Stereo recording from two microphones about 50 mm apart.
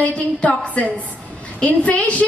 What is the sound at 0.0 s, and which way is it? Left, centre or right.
Speech, left.